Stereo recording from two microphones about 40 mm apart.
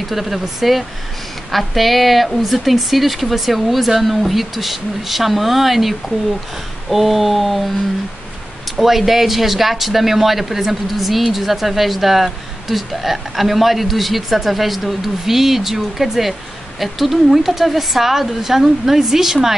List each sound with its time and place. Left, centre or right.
0.1 s a woman's voice: centre
8.7 s a woman's voice: centre